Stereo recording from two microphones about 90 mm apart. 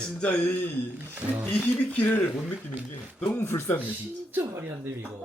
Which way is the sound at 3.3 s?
30° left (ahead or behind).